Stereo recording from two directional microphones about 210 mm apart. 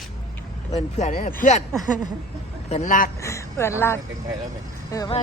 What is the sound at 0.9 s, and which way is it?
Speech, 35° left (ahead or behind).